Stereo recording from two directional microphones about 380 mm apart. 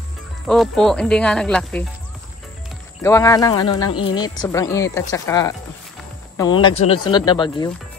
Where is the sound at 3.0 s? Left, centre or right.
Centre.